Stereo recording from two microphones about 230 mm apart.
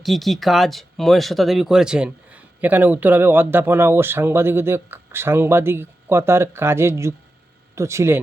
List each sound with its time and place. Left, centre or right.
0.0 s speech: centre